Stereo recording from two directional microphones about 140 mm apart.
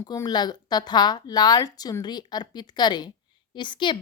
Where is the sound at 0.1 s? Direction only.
25° left (ahead or behind).